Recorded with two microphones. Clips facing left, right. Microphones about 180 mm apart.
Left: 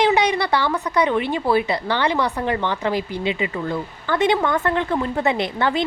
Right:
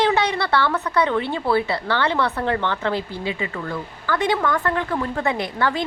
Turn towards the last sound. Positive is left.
turn(degrees=20)  # may be behind; listen again after turning